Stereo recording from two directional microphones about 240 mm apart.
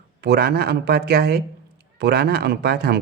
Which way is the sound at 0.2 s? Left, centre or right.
Right.